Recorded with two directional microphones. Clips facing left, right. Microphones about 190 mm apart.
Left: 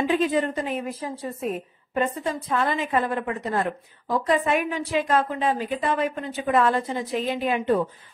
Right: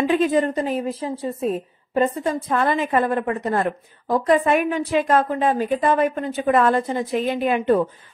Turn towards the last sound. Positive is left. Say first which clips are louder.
# right 4 dB
turn(degrees=-55)  # may be behind; listen again after turning